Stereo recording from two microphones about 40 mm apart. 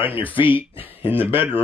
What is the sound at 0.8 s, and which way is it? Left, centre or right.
Speech, right.